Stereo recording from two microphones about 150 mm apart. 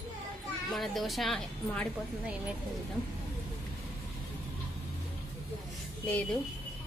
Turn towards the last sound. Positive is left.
turn(degrees=10)  # may be behind; listen again after turning